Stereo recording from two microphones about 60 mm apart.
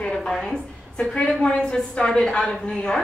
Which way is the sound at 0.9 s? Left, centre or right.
Centre.